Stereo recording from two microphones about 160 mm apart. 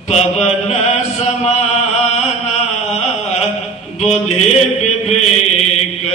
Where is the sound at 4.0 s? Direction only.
45° left (ahead or behind).